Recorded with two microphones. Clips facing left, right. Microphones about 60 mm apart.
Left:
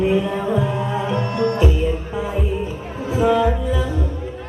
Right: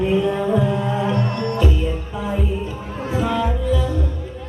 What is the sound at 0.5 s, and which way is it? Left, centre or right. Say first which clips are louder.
Music: right 1 dB; centre.